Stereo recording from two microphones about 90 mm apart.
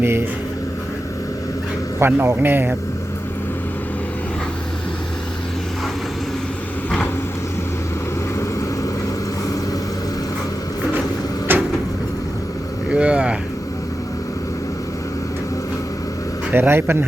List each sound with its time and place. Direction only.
0.0 s speech: 25° right (ahead or behind)
2.0 s speech: 25° right (ahead or behind)
11.5 s cupboard open or close: 20° right (ahead or behind)
12.9 s speech: 10° right (ahead or behind)
16.5 s speech: 25° right (ahead or behind)